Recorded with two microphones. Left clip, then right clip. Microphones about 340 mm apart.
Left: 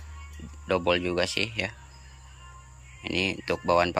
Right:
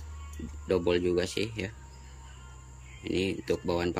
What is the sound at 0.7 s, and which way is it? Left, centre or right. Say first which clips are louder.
Speech: left 2 dB; centre.